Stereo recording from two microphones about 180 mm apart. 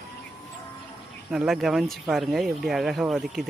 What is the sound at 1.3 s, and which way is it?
A man's voice, 5° right (ahead or behind).